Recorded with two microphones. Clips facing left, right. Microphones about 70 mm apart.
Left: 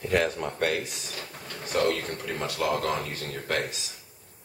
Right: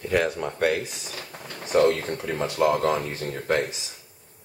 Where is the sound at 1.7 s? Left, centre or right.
Centre.